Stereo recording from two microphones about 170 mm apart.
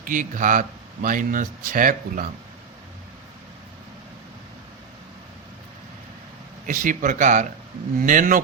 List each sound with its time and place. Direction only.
0.0 s speech: 50° right (ahead or behind)
6.7 s speech: 50° right (ahead or behind)